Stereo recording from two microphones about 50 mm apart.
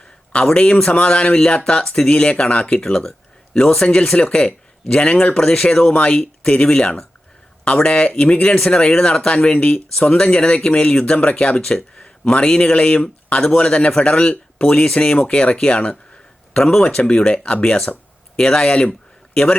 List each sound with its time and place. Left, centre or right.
0.5 s speech: left